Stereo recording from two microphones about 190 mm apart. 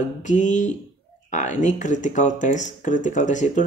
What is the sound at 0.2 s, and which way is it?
Speech, 40° left (ahead or behind).